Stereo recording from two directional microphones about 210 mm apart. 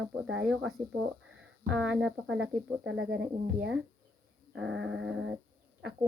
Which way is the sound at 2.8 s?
60° right (ahead or behind).